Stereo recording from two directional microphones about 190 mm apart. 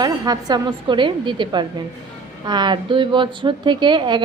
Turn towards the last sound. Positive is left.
turn(degrees=-25)  # may be behind; listen again after turning